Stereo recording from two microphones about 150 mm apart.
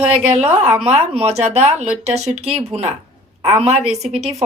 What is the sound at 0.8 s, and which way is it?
A woman's voice, 45° right (ahead or behind).